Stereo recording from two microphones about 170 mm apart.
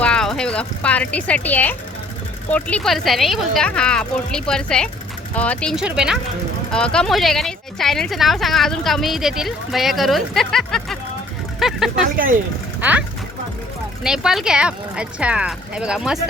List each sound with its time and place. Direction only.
0.0 s speech: 5° left (ahead or behind)
12.1 s speech: 55° right (ahead or behind)
12.8 s speech: 10° right (ahead or behind)